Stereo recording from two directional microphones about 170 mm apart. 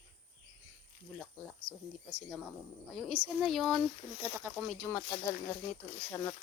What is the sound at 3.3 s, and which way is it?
Speech, centre (ahead or behind).